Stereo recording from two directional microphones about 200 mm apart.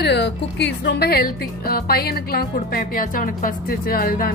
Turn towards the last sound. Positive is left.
turn(degrees=45)  # may be behind; listen again after turning